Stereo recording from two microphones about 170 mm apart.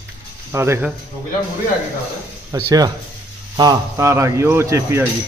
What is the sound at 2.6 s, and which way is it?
A man's voice, 25° right (ahead or behind).